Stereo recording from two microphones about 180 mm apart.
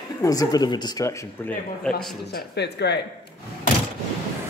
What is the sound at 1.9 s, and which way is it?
Speech, 65° left (ahead or behind).